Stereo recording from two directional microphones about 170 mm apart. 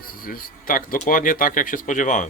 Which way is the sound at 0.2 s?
55° left (ahead or behind).